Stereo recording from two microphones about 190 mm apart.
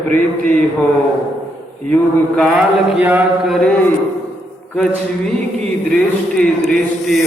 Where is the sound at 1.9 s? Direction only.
5° left (ahead or behind).